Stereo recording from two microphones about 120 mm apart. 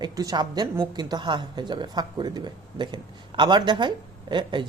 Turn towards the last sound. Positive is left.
turn(degrees=-40)  # may be behind; listen again after turning